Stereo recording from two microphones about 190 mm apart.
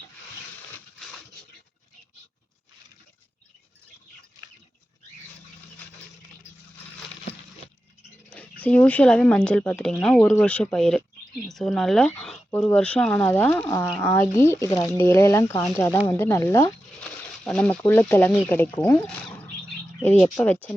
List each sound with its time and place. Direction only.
8.3 s speech: 5° left (ahead or behind)